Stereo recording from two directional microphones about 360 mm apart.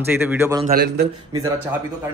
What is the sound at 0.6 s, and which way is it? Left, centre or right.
Speech, right.